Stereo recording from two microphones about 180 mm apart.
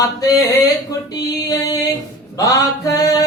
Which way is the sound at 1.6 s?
20° left (ahead or behind).